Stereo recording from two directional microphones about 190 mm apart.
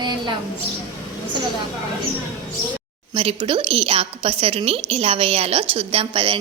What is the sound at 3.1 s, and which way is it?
A woman's voice, 25° right (ahead or behind).